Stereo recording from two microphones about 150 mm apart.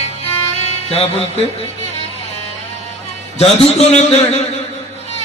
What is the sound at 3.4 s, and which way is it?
A man's voice, 45° left (ahead or behind).